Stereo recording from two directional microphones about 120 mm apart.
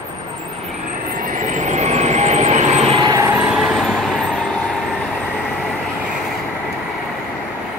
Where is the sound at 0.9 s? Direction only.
90° right; by 3.0 s 65° right (ahead or behind).